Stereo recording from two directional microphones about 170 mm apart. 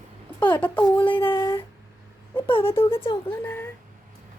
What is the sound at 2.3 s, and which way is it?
Wail, 30° left (ahead or behind).